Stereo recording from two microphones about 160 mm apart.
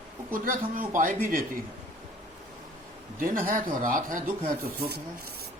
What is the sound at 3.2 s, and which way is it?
Speech, 60° right (ahead or behind).